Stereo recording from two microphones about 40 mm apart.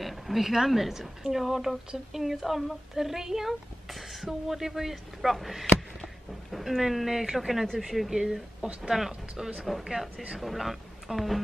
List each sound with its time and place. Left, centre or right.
0.0 s speech: centre
6.5 s a sound: centre
6.8 s a man's voice: centre
8.1 s a man's voice: centre